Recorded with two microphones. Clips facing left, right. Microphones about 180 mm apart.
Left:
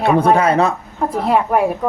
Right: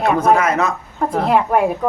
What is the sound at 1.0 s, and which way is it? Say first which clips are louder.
Speech: even; centre (ahead or behind).